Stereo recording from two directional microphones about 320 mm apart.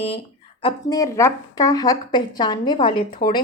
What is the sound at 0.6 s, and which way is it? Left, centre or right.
A woman's voice, centre.